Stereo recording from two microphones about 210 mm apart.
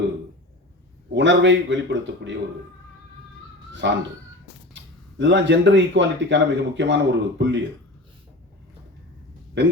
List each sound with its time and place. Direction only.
1.1 s speech: 60° right (ahead or behind)
3.8 s speech: 60° right (ahead or behind)